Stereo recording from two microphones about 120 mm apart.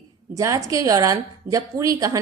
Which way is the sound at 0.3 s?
25° right (ahead or behind).